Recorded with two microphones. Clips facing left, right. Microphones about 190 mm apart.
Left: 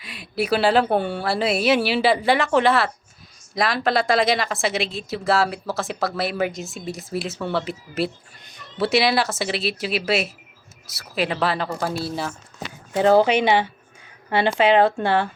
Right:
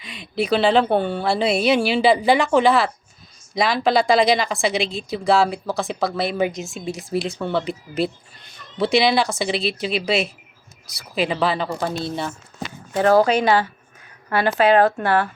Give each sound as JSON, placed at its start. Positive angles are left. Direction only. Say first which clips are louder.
{"t": 0.0, "sound": "speech", "louder": "right 1 dB", "side_deg": 5}
{"t": 12.9, "sound": "speech", "louder": "even", "side_deg": 20}